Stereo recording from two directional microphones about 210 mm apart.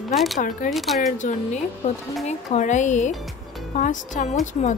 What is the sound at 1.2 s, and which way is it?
A woman's voice, 35° left (ahead or behind).